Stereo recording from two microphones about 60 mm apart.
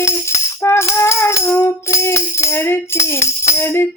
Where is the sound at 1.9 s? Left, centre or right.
Left.